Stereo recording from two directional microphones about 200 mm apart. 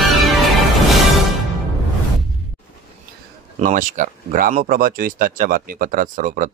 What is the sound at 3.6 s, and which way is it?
Speech, 40° right (ahead or behind).